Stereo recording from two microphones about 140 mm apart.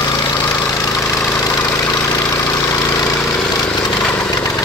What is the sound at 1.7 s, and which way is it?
Engine, 25° left (ahead or behind).